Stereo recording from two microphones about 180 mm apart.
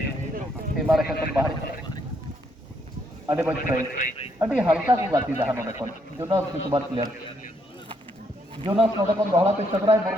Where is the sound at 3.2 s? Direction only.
15° right (ahead or behind).